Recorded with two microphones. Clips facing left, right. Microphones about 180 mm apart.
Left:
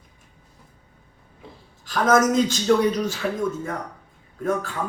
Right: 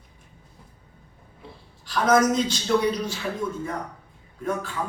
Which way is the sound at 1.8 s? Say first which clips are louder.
Left 1 dB; 45° left (ahead or behind).